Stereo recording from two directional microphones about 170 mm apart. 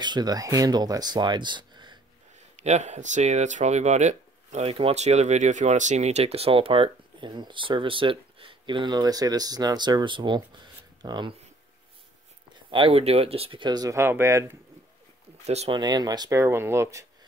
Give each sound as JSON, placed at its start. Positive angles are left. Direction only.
{"t": 0.0, "sound": "speech", "side_deg": -25}
{"t": 2.5, "sound": "speech", "side_deg": -40}
{"t": 12.6, "sound": "speech", "side_deg": -30}
{"t": 15.4, "sound": "speech", "side_deg": -40}
{"t": 15.8, "sound": "speech", "side_deg": -25}